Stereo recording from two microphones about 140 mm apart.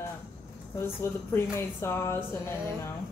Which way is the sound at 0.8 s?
15° left (ahead or behind).